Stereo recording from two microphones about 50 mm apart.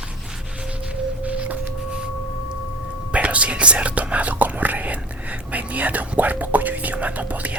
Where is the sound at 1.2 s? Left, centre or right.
Right.